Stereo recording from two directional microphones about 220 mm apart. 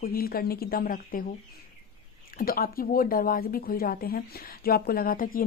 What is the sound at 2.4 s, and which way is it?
A woman's voice, 40° left (ahead or behind).